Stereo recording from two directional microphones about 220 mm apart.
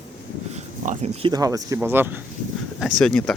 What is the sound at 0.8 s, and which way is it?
Speech, 30° right (ahead or behind).